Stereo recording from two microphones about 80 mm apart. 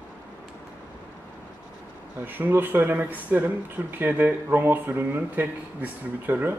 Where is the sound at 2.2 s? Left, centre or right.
Right.